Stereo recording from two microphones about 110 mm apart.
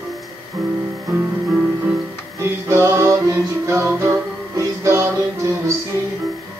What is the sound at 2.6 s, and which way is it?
Music, 25° right (ahead or behind).